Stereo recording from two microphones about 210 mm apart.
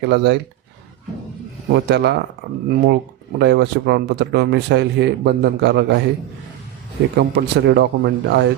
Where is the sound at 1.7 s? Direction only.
55° right (ahead or behind).